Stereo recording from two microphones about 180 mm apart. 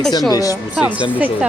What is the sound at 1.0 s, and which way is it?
Speech, 10° right (ahead or behind).